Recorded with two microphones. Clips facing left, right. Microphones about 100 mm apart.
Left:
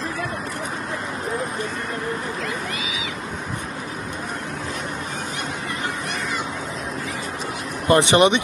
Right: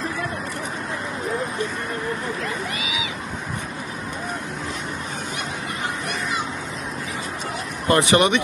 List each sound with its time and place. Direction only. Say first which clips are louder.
7.9 s speech: left 2 dB; 20° left (ahead or behind)